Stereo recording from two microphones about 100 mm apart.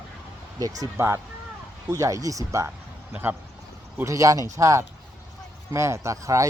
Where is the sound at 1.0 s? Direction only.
25° right (ahead or behind).